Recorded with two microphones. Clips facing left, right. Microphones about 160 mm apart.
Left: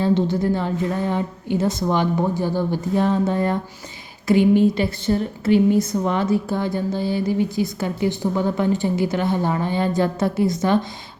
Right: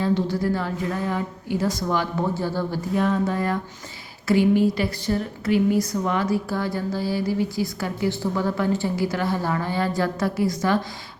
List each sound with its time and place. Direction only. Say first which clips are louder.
0.0 s speech: left 3 dB; 25° left (ahead or behind)
2.9 s speech: left 2 dB; 30° left (ahead or behind)